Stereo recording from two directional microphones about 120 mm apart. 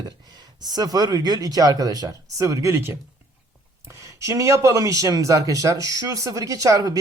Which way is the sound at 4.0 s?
25° right (ahead or behind).